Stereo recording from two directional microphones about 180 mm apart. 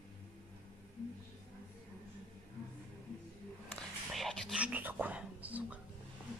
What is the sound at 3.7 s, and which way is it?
Whispering, centre (ahead or behind).